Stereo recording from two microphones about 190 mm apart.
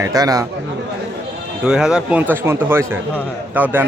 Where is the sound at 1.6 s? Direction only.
5° right (ahead or behind).